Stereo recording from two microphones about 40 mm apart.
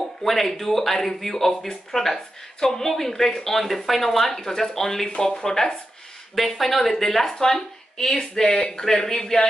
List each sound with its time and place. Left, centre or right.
0.2 s a woman's voice: centre
6.3 s a woman's voice: centre